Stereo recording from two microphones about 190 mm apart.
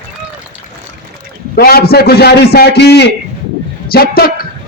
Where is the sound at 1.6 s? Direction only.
55° left (ahead or behind).